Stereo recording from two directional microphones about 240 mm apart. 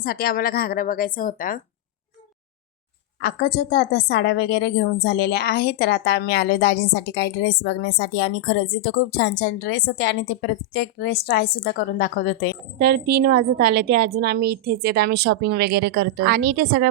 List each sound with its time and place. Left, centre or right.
0.0 s a woman's voice: left
3.2 s a woman's voice: left
12.8 s a woman's voice: right